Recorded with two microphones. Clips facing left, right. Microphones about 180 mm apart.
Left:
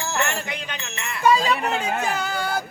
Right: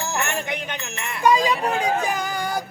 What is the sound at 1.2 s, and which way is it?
Speech, 15° right (ahead or behind).